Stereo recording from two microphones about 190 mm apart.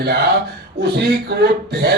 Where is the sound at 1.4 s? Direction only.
55° right (ahead or behind).